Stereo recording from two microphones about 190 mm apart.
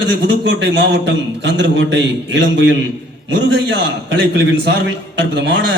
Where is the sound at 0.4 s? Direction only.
65° right (ahead or behind).